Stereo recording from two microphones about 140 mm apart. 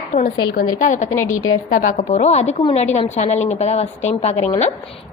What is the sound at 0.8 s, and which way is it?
A woman's voice, 65° left (ahead or behind).